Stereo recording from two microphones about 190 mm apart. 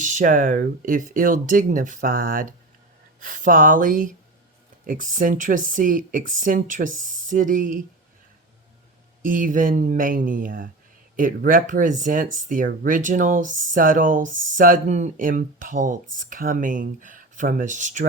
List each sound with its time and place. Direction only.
0.0 s speech: 40° right (ahead or behind)
9.2 s speech: 45° right (ahead or behind)